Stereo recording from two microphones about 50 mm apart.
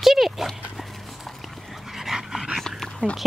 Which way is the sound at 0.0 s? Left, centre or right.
Centre.